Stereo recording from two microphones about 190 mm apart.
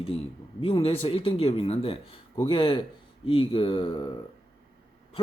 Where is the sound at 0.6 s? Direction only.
30° left (ahead or behind).